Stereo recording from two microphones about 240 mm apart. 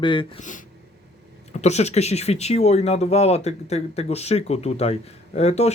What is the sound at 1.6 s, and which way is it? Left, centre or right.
Speech, left.